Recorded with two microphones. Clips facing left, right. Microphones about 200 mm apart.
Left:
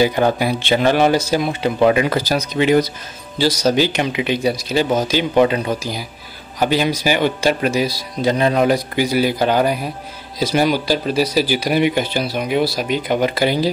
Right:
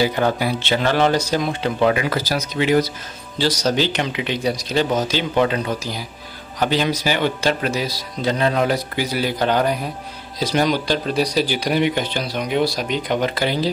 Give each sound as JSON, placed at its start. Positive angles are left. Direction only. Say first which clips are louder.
{"t": 0.0, "sound": "speech", "louder": "left 3 dB", "side_deg": 15}
{"t": 3.3, "sound": "speech", "louder": "left 3 dB", "side_deg": 10}